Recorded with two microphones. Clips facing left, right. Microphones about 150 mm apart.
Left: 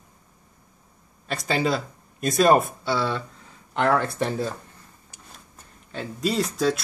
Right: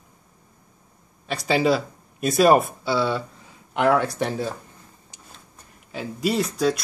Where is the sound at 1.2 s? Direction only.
Centre (ahead or behind).